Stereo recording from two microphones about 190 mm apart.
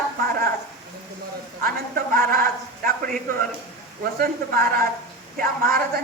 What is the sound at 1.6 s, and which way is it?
A man's voice, 50° right (ahead or behind).